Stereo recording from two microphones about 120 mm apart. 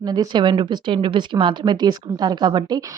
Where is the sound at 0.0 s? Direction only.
35° right (ahead or behind).